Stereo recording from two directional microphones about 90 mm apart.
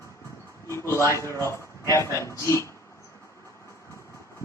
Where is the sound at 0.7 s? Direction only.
30° left (ahead or behind).